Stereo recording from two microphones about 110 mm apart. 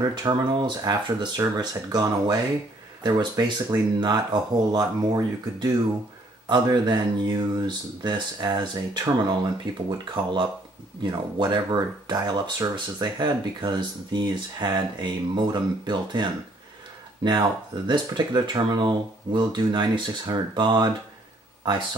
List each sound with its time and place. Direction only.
0.1 s speech: 40° right (ahead or behind)